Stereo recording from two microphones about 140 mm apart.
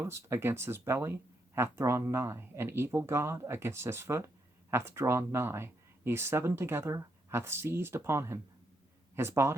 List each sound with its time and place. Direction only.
0.0 s speech: 20° right (ahead or behind)